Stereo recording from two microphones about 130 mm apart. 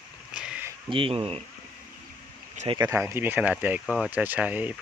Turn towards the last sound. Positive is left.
turn(degrees=-10)  # may be behind; listen again after turning